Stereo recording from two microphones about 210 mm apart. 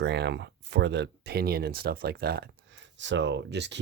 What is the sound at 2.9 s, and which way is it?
Speech, 60° right (ahead or behind).